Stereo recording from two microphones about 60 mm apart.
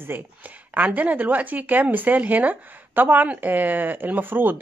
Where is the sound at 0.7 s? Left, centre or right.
Right.